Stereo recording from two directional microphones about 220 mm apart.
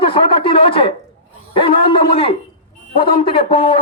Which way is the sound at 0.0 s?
25° left (ahead or behind).